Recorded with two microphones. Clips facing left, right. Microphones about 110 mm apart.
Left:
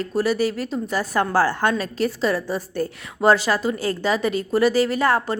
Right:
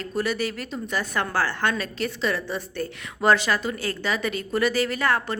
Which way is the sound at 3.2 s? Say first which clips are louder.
Left 3 dB; 35° left (ahead or behind).